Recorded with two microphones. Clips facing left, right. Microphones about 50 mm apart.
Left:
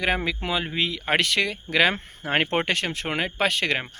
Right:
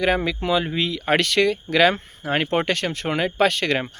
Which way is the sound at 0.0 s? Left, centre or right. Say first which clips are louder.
Right 4 dB; centre.